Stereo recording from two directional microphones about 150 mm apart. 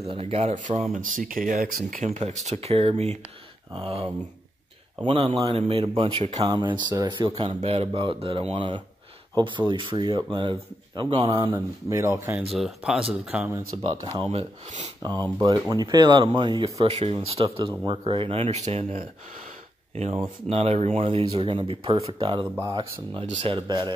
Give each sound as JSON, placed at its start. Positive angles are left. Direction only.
{"t": 0.1, "sound": "speech", "side_deg": -40}
{"t": 2.0, "sound": "speech", "side_deg": -50}
{"t": 6.4, "sound": "speech", "side_deg": -30}
{"t": 11.5, "sound": "speech", "side_deg": -15}
{"t": 12.5, "sound": "speech", "side_deg": 0}
{"t": 14.0, "sound": "speech", "side_deg": -35}
{"t": 16.6, "sound": "speech", "side_deg": -45}
{"t": 23.2, "sound": "speech", "side_deg": -50}
{"t": 23.5, "sound": "speech", "side_deg": -30}